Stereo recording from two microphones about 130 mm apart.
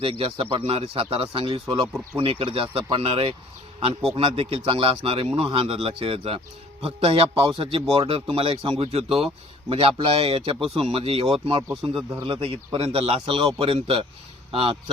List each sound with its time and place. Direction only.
0.0 s speech: 45° right (ahead or behind)
11.7 s speech: centre (ahead or behind)
12.3 s speech: 45° right (ahead or behind)